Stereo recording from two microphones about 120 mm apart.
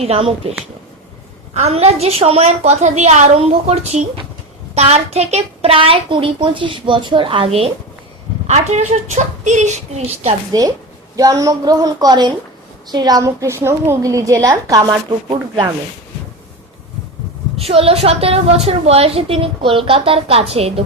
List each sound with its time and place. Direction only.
0.0 s a woman's voice: 55° right (ahead or behind)
1.5 s a woman's voice: 60° right (ahead or behind)
8.4 s a woman's voice: 70° right (ahead or behind)
10.5 s a woman's voice: 30° right (ahead or behind)
15.3 s speech: 40° right (ahead or behind)
17.6 s a woman's voice: 55° right (ahead or behind)